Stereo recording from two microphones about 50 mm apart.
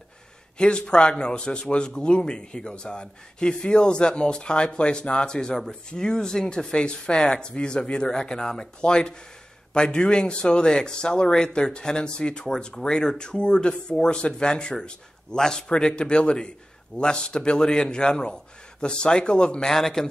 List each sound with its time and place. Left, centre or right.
0.6 s speech: centre